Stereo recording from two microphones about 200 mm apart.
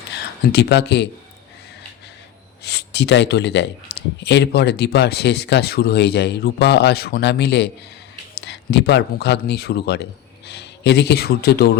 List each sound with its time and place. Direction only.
0.1 s speech: 55° left (ahead or behind)
2.6 s speech: 55° left (ahead or behind)